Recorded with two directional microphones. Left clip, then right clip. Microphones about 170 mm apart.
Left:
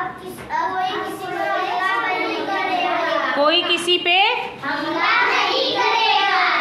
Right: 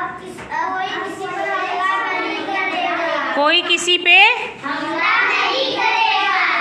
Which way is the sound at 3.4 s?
25° right (ahead or behind).